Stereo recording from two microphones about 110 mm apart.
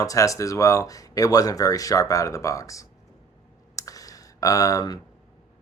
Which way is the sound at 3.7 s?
30° left (ahead or behind).